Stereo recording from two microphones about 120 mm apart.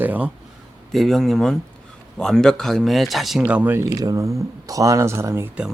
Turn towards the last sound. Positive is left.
turn(degrees=-20)  # may be behind; listen again after turning